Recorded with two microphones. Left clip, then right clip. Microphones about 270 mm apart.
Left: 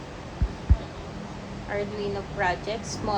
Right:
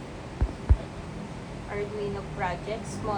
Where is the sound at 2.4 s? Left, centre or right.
Left.